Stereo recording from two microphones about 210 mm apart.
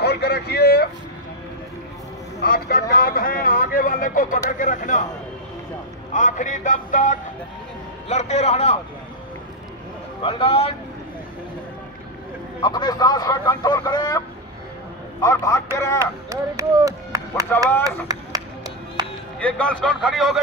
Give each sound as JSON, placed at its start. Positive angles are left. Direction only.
{"t": 0.0, "sound": "a sound", "side_deg": 50}
{"t": 2.4, "sound": "speech", "side_deg": 45}
{"t": 6.1, "sound": "speech", "side_deg": 40}
{"t": 10.2, "sound": "speech", "side_deg": 30}
{"t": 12.6, "sound": "a man's voice", "side_deg": 20}
{"t": 16.0, "sound": "speech", "side_deg": -15}
{"t": 19.0, "sound": "music", "side_deg": -20}
{"t": 19.4, "sound": "speech", "side_deg": 5}